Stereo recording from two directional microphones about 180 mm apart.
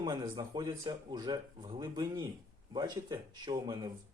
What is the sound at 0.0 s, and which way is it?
Speech, 20° right (ahead or behind).